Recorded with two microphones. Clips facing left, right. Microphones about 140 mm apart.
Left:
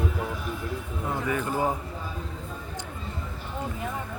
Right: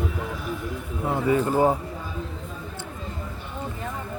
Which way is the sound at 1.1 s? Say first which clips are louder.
Right 7 dB; 30° right (ahead or behind).